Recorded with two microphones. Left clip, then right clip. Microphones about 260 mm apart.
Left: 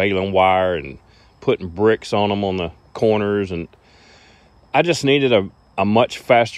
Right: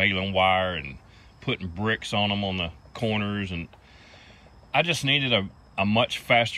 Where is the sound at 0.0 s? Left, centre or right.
Left.